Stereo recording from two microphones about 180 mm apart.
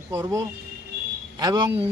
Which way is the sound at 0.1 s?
20° right (ahead or behind).